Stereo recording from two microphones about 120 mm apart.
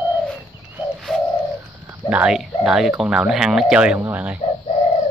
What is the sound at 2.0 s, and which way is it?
Speech, 10° right (ahead or behind).